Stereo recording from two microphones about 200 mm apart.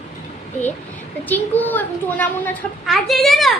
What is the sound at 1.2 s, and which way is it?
A woman's voice, 10° left (ahead or behind).